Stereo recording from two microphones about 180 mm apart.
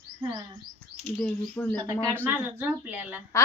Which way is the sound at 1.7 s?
20° right (ahead or behind).